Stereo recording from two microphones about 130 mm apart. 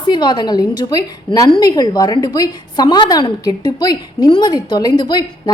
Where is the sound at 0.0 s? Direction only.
35° left (ahead or behind).